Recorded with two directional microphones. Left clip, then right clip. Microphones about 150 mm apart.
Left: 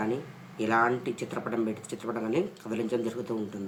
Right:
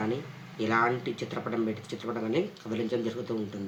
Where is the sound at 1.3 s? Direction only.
15° left (ahead or behind).